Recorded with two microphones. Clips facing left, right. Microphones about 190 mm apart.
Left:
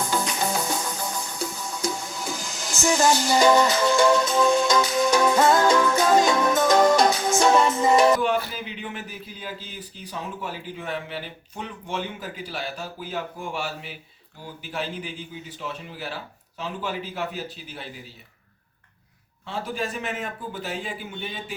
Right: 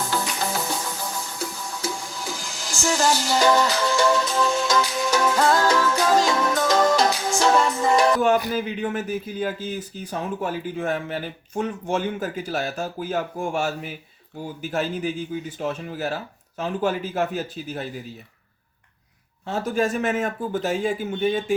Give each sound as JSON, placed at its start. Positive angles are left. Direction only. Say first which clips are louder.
{"t": 0.0, "sound": "cricket", "louder": "even", "side_deg": 0}
{"t": 0.4, "sound": "music", "louder": "left 1 dB", "side_deg": 0}
{"t": 8.5, "sound": "speech", "louder": "right 9 dB", "side_deg": -45}
{"t": 19.5, "sound": "speech", "louder": "right 7 dB", "side_deg": -45}